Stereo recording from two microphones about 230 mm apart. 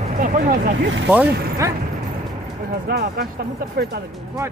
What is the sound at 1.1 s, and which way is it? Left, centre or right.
Speech, centre.